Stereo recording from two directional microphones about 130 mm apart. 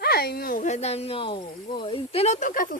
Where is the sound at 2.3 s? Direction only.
90° left.